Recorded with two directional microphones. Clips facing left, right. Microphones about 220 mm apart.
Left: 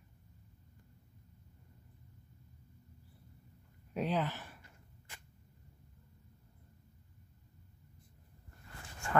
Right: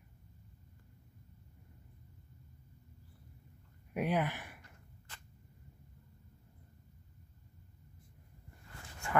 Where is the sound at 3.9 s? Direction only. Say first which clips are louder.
Right 1 dB; 10° right (ahead or behind).